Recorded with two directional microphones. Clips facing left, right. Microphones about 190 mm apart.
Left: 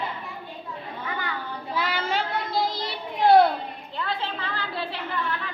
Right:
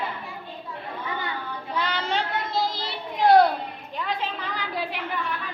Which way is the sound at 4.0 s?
15° right (ahead or behind).